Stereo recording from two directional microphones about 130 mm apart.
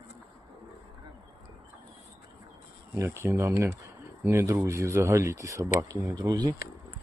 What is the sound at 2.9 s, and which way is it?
Speech, 20° right (ahead or behind).